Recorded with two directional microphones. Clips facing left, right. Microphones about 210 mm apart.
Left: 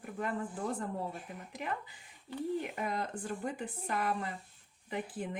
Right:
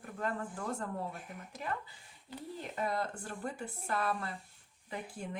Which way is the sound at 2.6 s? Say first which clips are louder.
Right 1 dB; 15° left (ahead or behind).